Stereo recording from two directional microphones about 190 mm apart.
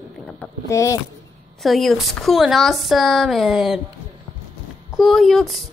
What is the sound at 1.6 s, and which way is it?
A woman's voice, centre (ahead or behind).